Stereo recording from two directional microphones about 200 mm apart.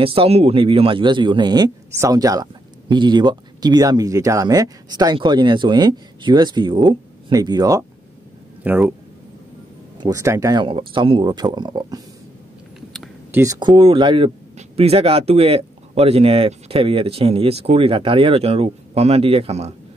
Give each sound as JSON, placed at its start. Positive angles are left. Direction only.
{"t": 0.0, "sound": "a man's voice", "side_deg": -30}
{"t": 9.9, "sound": "a man's voice", "side_deg": -15}
{"t": 13.3, "sound": "a man's voice", "side_deg": -15}